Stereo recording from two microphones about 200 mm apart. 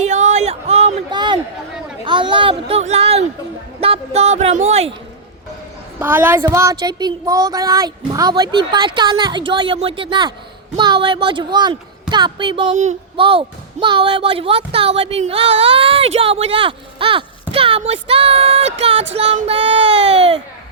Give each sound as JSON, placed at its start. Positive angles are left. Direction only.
{"t": 0.0, "sound": "a sound", "side_deg": -35}
{"t": 2.0, "sound": "a man's voice", "side_deg": -25}
{"t": 6.0, "sound": "speech", "side_deg": -10}
{"t": 12.7, "sound": "speech", "side_deg": -35}